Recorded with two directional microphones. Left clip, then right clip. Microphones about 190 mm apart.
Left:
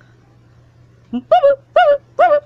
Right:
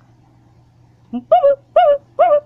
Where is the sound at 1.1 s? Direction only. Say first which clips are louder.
Left 1 dB; 20° left (ahead or behind).